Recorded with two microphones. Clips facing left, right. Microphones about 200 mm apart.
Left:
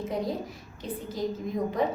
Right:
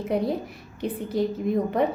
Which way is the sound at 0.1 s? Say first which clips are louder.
Right 9 dB; 65° right (ahead or behind).